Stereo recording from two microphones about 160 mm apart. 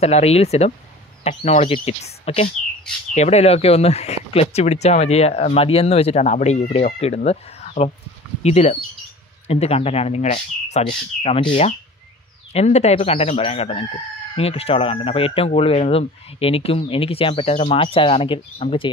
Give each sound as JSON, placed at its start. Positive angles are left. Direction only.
{"t": 0.0, "sound": "speech", "side_deg": 40}